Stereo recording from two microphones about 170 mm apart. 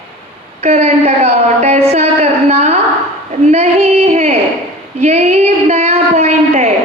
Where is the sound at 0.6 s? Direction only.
40° right (ahead or behind).